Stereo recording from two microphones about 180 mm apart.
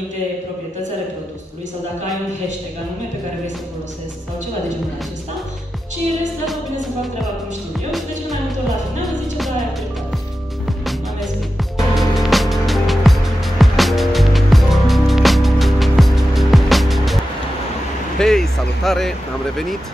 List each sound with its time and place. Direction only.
6.4 s music: centre (ahead or behind)
11.9 s music: centre (ahead or behind)
18.2 s a sound: centre (ahead or behind)